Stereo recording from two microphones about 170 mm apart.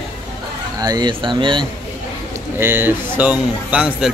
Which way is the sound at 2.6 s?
10° right (ahead or behind).